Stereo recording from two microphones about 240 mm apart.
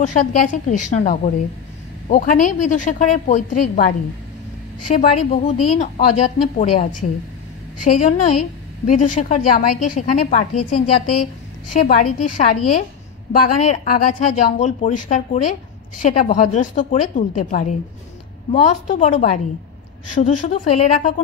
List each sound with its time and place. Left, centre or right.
0.0 s a woman's voice: left
4.9 s a woman's voice: left